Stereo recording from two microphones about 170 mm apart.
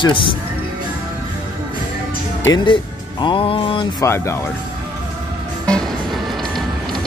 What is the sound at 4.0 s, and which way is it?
Speech, 15° left (ahead or behind).